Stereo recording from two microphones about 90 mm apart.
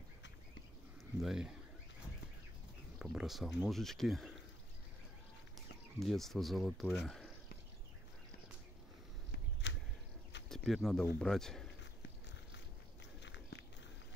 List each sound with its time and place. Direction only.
1.2 s speech: 5° right (ahead or behind)
3.0 s speech: 5° right (ahead or behind)
5.9 s speech: 5° left (ahead or behind)
10.5 s speech: 5° left (ahead or behind)